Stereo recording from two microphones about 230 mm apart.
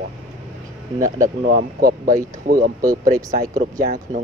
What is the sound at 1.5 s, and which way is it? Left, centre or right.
A man's voice, right.